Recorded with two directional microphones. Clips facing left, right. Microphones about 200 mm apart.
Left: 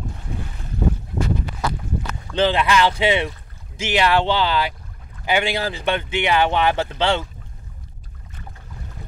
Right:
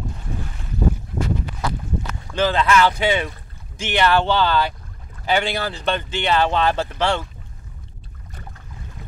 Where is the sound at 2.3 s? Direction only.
15° left (ahead or behind).